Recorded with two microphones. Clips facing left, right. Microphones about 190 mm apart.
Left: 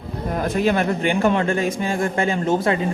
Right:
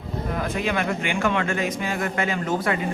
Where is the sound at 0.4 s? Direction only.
40° left (ahead or behind).